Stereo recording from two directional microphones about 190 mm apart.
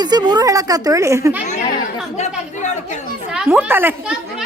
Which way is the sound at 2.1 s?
40° left (ahead or behind).